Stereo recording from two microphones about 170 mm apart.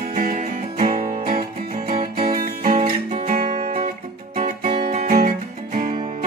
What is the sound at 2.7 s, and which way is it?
Guitar, 35° right (ahead or behind).